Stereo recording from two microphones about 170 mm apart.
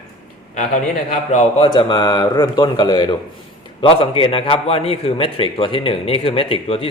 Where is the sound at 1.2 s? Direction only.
45° left (ahead or behind).